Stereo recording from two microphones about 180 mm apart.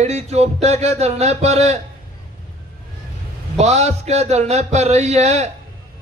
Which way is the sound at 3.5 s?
35° right (ahead or behind).